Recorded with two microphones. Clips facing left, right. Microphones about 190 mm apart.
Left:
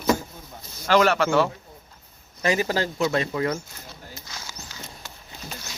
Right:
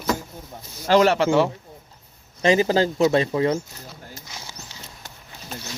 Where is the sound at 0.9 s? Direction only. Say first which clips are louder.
Right 3 dB; 25° right (ahead or behind).